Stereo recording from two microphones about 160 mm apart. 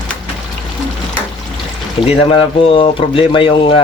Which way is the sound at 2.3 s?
30° left (ahead or behind).